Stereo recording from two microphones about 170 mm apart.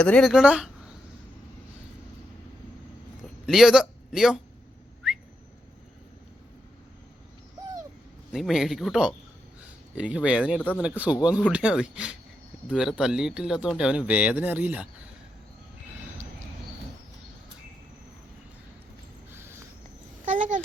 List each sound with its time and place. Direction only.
0.0 s speech: 5° left (ahead or behind)
3.4 s a man's voice: centre (ahead or behind)
8.3 s speech: centre (ahead or behind)
10.6 s speech: 10° left (ahead or behind)
10.8 s speech: 10° right (ahead or behind)
19.3 s a sound: 15° right (ahead or behind)
20.2 s a sound: 50° right (ahead or behind)